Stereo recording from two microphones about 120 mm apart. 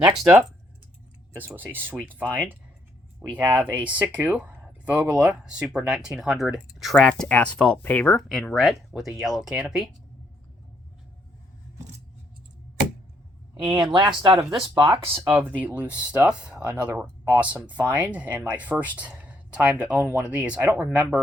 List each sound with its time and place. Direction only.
0.0 s speech: 5° right (ahead or behind)
1.6 s speech: 15° right (ahead or behind)
13.7 s speech: 40° right (ahead or behind)
15.3 s speech: 15° right (ahead or behind)
18.9 s a sound: 10° right (ahead or behind)
19.8 s speech: 10° right (ahead or behind)